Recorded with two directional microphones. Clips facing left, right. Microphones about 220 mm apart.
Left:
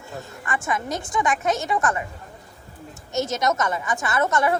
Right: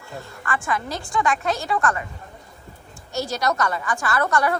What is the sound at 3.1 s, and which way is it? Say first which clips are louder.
A woman's voice: left 1 dB; 20° left (ahead or behind).